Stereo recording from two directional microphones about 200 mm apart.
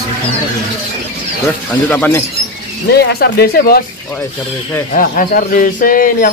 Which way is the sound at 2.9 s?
55° left (ahead or behind).